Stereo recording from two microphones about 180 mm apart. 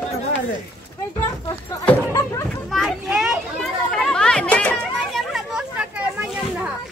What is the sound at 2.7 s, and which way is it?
Children playing, centre (ahead or behind).